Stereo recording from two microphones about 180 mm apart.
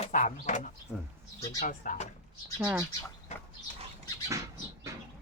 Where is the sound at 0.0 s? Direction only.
40° left (ahead or behind).